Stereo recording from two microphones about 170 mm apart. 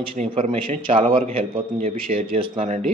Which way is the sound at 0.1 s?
40° right (ahead or behind).